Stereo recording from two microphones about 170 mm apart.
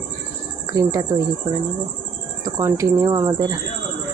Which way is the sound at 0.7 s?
20° right (ahead or behind).